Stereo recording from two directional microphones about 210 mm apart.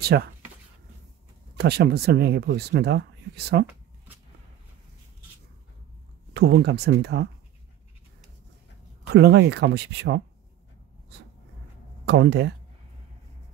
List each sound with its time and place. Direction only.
0.0 s speech: 50° right (ahead or behind)
1.6 s speech: 50° right (ahead or behind)
6.3 s speech: 50° right (ahead or behind)
9.1 s speech: 55° right (ahead or behind)
12.1 s speech: 55° right (ahead or behind)